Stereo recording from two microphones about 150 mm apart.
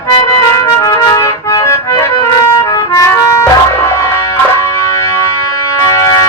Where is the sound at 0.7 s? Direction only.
25° left (ahead or behind).